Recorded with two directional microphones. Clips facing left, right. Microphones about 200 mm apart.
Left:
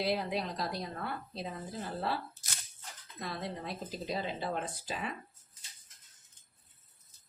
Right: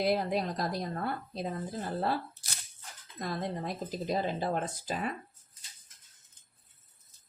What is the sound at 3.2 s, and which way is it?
Speech, 45° right (ahead or behind).